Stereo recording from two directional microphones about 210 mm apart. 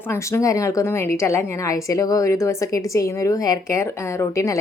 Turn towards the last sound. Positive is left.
turn(degrees=15)  # may be behind; listen again after turning